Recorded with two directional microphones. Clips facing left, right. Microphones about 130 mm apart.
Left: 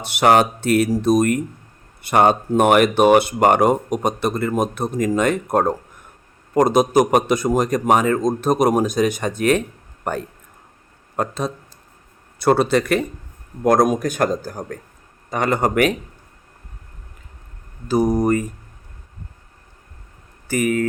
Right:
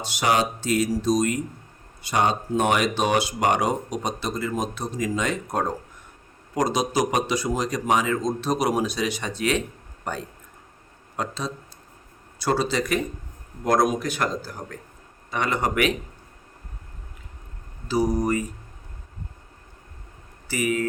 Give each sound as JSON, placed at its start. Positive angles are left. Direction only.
{"t": 0.0, "sound": "speech", "side_deg": 60}
{"t": 13.7, "sound": "speech", "side_deg": 50}
{"t": 17.8, "sound": "speech", "side_deg": 50}
{"t": 20.5, "sound": "speech", "side_deg": 50}